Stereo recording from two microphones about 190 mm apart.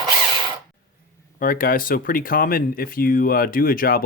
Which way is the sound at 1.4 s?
45° left (ahead or behind).